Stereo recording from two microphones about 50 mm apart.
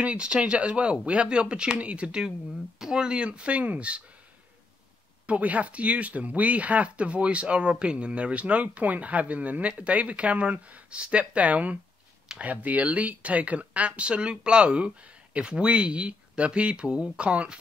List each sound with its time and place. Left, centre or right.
0.0 s speech: right
5.2 s speech: right